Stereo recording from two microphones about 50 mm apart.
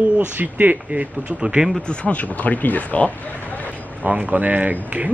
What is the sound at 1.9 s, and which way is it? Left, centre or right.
Speech, left.